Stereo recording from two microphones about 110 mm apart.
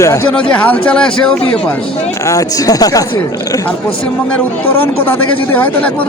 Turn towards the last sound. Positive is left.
turn(degrees=15)  # may be behind; listen again after turning